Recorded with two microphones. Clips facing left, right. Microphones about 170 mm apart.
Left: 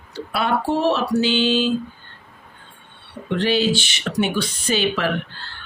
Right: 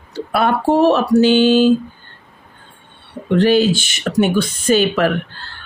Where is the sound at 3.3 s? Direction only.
45° right (ahead or behind).